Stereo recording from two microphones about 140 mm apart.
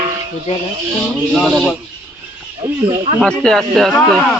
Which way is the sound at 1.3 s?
Centre (ahead or behind).